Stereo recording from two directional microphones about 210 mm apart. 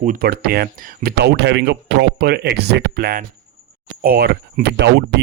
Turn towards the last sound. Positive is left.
turn(degrees=-55)  # may be behind; listen again after turning